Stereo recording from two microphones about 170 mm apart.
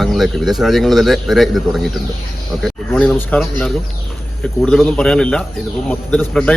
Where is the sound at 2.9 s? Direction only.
10° left (ahead or behind).